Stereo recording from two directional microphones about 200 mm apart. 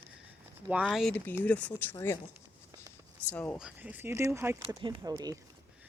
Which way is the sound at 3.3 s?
5° left (ahead or behind).